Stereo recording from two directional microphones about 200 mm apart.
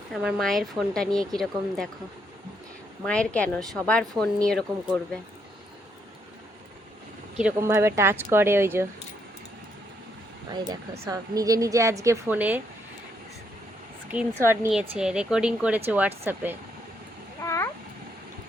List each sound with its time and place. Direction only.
0.1 s speech: centre (ahead or behind)
3.0 s speech: 5° left (ahead or behind)
7.5 s a woman's voice: 15° right (ahead or behind)
10.5 s a woman's voice: 20° right (ahead or behind)
14.1 s a woman's voice: 10° right (ahead or behind)
17.4 s cat: 15° left (ahead or behind)